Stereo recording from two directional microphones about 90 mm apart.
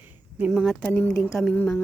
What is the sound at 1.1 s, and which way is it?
Speech, 5° left (ahead or behind).